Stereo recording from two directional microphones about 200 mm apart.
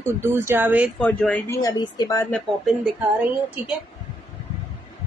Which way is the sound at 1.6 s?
20° left (ahead or behind).